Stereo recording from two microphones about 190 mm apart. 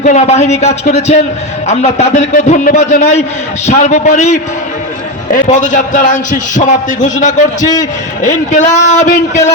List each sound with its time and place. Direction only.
0.0 s a man's voice: 40° left (ahead or behind)